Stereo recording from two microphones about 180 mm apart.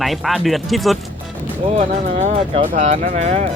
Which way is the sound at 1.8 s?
40° right (ahead or behind).